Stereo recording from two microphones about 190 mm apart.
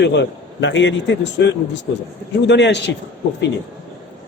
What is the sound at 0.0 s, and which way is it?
A man's voice, 65° left (ahead or behind).